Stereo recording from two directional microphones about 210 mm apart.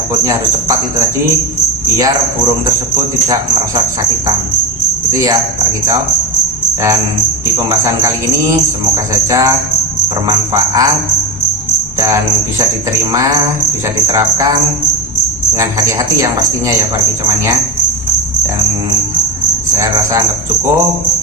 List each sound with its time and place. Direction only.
0.2 s speech: 15° right (ahead or behind)
2.6 s speech: 15° right (ahead or behind)
5.1 s speech: 15° right (ahead or behind)
7.7 s speech: 15° right (ahead or behind)
11.9 s speech: 15° right (ahead or behind)
14.1 s speech: 20° right (ahead or behind)
15.5 s speech: 15° right (ahead or behind)
19.7 s speech: 15° right (ahead or behind)